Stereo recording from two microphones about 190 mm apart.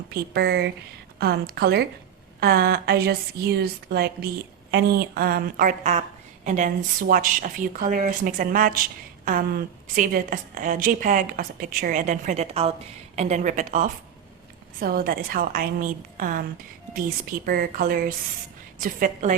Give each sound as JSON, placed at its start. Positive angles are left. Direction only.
{"t": 0.1, "sound": "a woman's voice", "side_deg": -60}